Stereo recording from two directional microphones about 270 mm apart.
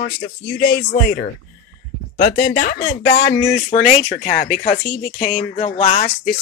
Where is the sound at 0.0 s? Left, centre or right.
Left.